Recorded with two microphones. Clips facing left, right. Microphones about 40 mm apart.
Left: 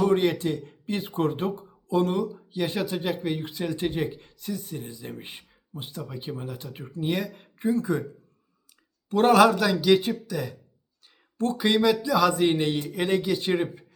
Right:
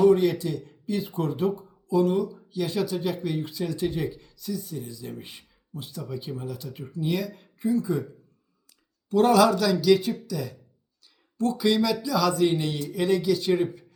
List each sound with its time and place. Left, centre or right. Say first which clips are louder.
0.0 s speech: right 3 dB; left
2.5 s speech: even; left
9.0 s speech: left 1 dB; left